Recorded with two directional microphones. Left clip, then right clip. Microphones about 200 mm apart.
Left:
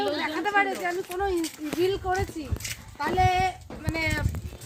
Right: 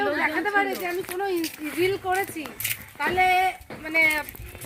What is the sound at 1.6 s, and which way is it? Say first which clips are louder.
Speech: right 2 dB; 10° right (ahead or behind).